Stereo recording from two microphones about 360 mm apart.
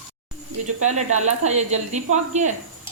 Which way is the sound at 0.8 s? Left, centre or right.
Centre.